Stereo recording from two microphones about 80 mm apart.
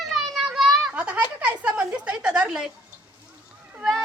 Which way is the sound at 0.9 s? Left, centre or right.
Centre.